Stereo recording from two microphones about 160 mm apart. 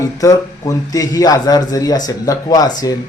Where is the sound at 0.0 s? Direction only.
20° left (ahead or behind).